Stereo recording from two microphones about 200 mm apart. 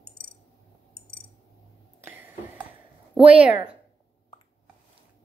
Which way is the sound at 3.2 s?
5° right (ahead or behind).